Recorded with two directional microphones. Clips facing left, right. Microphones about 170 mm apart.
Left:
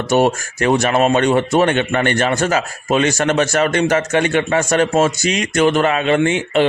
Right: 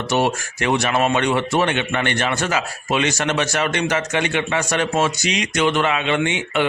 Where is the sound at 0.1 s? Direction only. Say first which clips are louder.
Left 5 dB; 45° left (ahead or behind).